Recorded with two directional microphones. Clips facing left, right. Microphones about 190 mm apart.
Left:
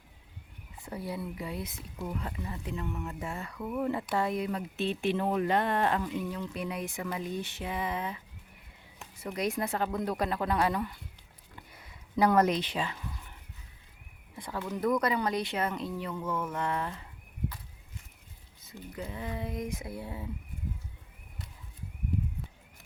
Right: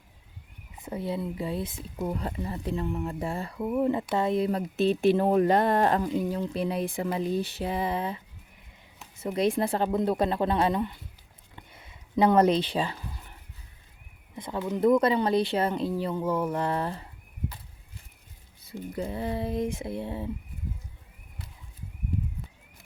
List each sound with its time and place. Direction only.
0.8 s speech: 20° right (ahead or behind)
11.5 s a sound: 25° right (ahead or behind)
14.3 s speech: 20° right (ahead or behind)
18.6 s speech: 30° right (ahead or behind)